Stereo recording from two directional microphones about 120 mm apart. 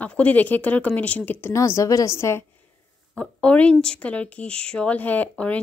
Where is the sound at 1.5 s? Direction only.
25° left (ahead or behind).